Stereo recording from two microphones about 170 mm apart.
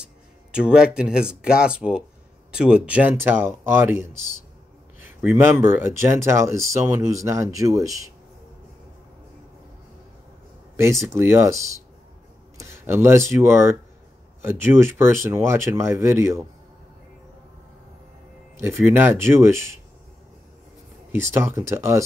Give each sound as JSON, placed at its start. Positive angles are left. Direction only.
{"t": 0.0, "sound": "speech", "side_deg": -5}
{"t": 11.1, "sound": "speech", "side_deg": -15}
{"t": 18.6, "sound": "speech", "side_deg": -10}
{"t": 21.1, "sound": "speech", "side_deg": -15}